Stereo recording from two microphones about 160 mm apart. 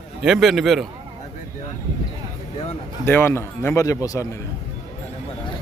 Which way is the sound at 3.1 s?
15° left (ahead or behind).